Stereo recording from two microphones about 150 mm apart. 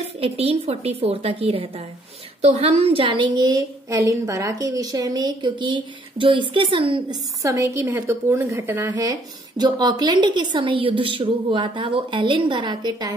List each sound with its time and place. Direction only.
0.2 s a woman's voice: 40° right (ahead or behind)
7.4 s a woman's voice: 20° right (ahead or behind)
9.6 s a woman's voice: 30° right (ahead or behind)